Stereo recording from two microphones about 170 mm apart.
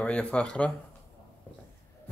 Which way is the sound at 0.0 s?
5° left (ahead or behind).